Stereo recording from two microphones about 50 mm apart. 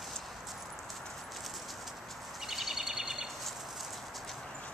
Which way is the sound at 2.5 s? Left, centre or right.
Centre.